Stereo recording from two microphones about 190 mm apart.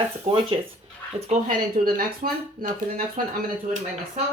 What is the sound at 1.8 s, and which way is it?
Speech, 50° right (ahead or behind).